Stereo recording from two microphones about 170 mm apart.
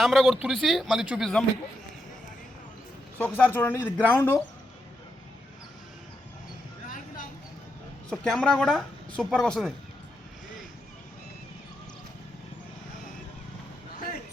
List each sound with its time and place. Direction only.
0.0 s speech: centre (ahead or behind)
3.2 s speech: 10° left (ahead or behind)
6.8 s a sound: 50° left (ahead or behind)
8.1 s speech: 5° left (ahead or behind)